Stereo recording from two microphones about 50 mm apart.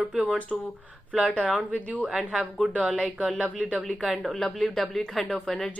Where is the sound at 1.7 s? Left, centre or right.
Left.